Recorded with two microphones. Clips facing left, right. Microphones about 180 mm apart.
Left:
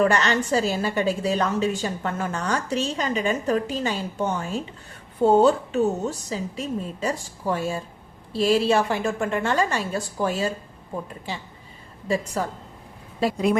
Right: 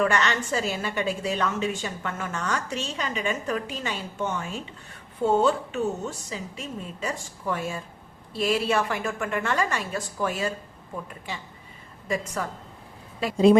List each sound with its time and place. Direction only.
0.0 s a woman's voice: 35° left (ahead or behind)
13.3 s speech: 25° right (ahead or behind)